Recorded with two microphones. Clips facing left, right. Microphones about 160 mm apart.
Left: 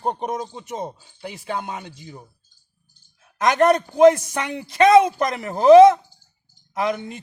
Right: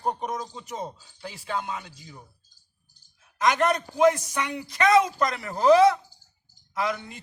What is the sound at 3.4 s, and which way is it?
Speech, 50° left (ahead or behind).